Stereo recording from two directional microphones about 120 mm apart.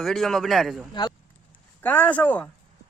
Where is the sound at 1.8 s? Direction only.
15° left (ahead or behind).